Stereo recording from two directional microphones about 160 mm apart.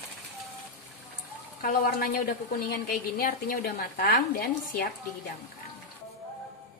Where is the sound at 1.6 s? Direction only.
65° left (ahead or behind).